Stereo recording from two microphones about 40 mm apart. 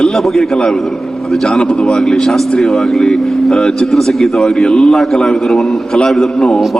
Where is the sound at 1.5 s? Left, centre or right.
Left; by 4.4 s centre.